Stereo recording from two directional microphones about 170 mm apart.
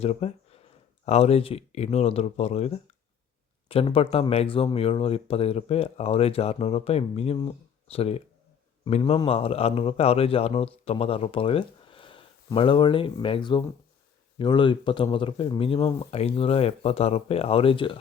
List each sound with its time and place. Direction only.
0.0 s speech: 35° left (ahead or behind)